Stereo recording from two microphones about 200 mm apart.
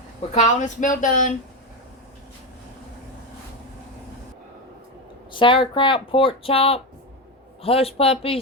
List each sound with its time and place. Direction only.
0.3 s speech: 35° left (ahead or behind)
5.3 s speech: 25° left (ahead or behind)